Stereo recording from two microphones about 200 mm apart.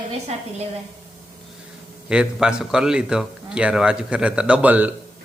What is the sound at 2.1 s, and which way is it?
A man's voice, 5° right (ahead or behind).